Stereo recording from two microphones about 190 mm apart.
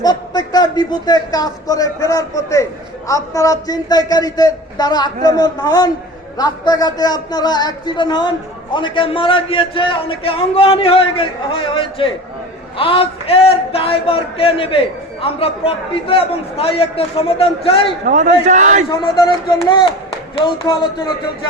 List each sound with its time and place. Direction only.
0.0 s a man's voice: 20° left (ahead or behind)
18.0 s a man's voice: 40° right (ahead or behind)
18.9 s a man's voice: 20° left (ahead or behind)